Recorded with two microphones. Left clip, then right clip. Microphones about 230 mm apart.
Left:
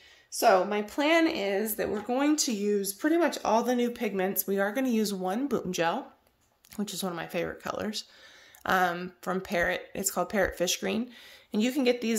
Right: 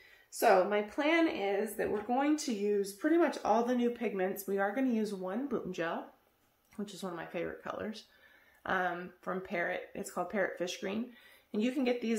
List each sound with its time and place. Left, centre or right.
0.4 s a woman's voice: left